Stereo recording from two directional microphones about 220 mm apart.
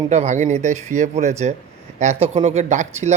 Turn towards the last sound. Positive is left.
turn(degrees=-30)  # may be behind; listen again after turning